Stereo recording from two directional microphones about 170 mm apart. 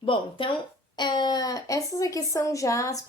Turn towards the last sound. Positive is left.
turn(degrees=20)  # may be behind; listen again after turning